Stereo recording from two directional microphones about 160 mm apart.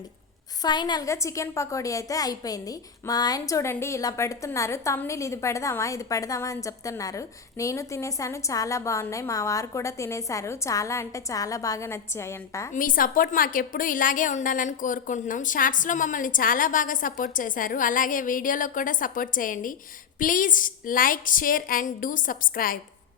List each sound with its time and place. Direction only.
0.6 s a woman's voice: 25° left (ahead or behind)
12.7 s a woman's voice: 60° left (ahead or behind)